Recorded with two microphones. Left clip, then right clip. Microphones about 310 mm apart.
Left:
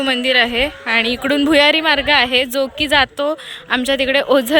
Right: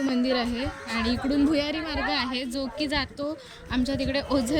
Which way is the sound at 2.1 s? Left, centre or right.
Centre.